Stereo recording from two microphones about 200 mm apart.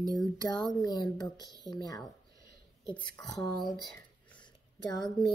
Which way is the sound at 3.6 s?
5° left (ahead or behind).